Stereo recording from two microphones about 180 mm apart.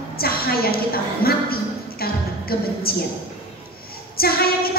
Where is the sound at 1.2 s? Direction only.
55° left (ahead or behind).